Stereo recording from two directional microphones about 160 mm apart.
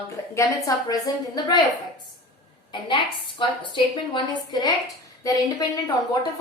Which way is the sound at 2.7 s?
30° left (ahead or behind).